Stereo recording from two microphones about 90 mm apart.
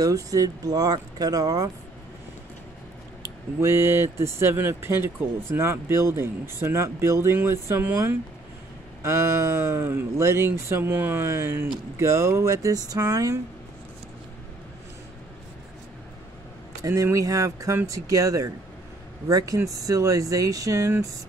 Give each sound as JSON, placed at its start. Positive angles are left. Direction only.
{"t": 0.0, "sound": "speech", "side_deg": -40}
{"t": 3.2, "sound": "speech", "side_deg": -30}
{"t": 16.8, "sound": "speech", "side_deg": -35}